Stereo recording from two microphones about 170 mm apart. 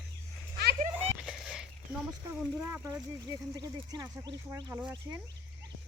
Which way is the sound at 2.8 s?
20° right (ahead or behind).